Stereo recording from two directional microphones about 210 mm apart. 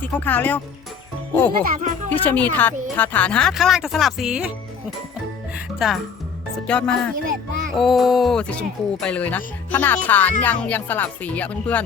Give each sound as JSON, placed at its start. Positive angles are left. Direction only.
{"t": 0.0, "sound": "music", "side_deg": 10}
{"t": 1.6, "sound": "speech", "side_deg": -40}
{"t": 2.0, "sound": "music", "side_deg": 10}
{"t": 2.8, "sound": "speech", "side_deg": 10}
{"t": 6.7, "sound": "speech", "side_deg": 5}
{"t": 10.4, "sound": "music", "side_deg": 5}